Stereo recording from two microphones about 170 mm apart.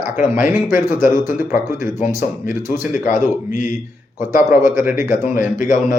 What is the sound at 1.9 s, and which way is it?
Speech, 55° left (ahead or behind).